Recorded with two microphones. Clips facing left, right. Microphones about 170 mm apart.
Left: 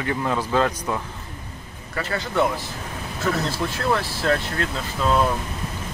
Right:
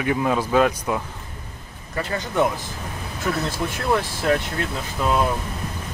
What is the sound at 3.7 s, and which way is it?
Speech, 15° right (ahead or behind).